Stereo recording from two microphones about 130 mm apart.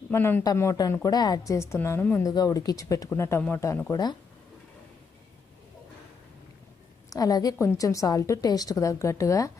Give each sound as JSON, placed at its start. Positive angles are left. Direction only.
{"t": 0.1, "sound": "a woman's voice", "side_deg": 15}
{"t": 2.2, "sound": "a woman's voice", "side_deg": 30}
{"t": 7.1, "sound": "a woman's voice", "side_deg": 30}